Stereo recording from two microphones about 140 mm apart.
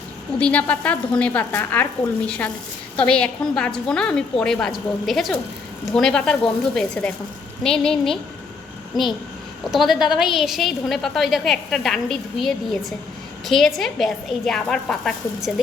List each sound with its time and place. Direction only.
0.3 s a woman's voice: 10° left (ahead or behind)
9.7 s a woman's voice: centre (ahead or behind)